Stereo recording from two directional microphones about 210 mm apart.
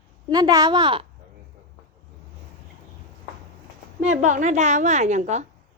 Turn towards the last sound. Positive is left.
turn(degrees=-35)  # may be behind; listen again after turning